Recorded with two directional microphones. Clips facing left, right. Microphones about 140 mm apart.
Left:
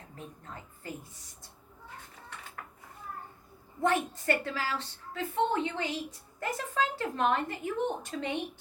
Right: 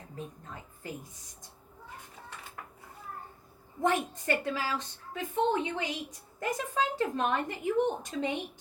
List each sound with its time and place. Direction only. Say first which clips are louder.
3.8 s a woman's voice: even; 15° right (ahead or behind)